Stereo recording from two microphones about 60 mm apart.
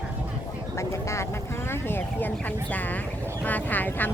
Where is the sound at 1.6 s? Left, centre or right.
Left.